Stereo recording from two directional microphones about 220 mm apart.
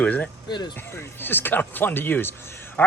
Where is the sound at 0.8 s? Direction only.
10° left (ahead or behind).